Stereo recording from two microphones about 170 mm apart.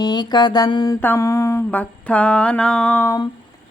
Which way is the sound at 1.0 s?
15° left (ahead or behind).